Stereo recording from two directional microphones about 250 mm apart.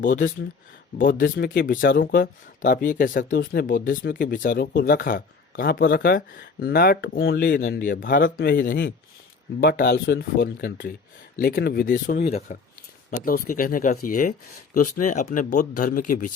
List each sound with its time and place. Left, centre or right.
0.0 s speech: left